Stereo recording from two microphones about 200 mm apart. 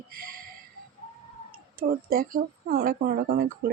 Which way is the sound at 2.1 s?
45° right (ahead or behind).